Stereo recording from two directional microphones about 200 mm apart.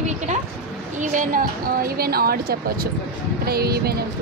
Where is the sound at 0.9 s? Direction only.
40° right (ahead or behind).